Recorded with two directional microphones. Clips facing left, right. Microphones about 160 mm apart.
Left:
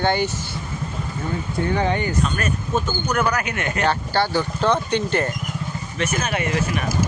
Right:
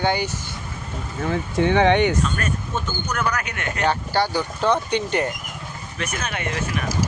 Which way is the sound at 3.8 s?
15° right (ahead or behind).